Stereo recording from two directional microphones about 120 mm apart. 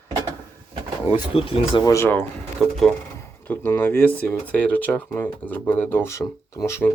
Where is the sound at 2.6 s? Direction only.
Centre (ahead or behind).